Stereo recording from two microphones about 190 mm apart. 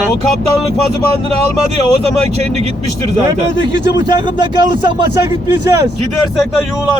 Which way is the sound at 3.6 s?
25° right (ahead or behind).